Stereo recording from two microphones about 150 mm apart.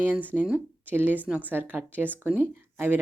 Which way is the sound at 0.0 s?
10° right (ahead or behind).